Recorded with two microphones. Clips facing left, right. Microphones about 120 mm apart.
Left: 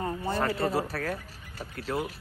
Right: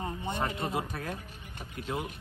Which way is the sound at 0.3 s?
20° right (ahead or behind).